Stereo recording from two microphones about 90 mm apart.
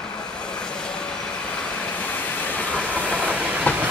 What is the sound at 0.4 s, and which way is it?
Vehicle, 10° left (ahead or behind).